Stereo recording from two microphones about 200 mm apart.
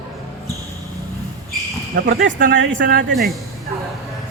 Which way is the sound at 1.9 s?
45° right (ahead or behind).